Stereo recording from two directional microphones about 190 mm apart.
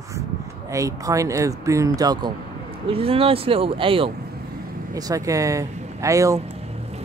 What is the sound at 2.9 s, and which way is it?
Speech, 30° right (ahead or behind).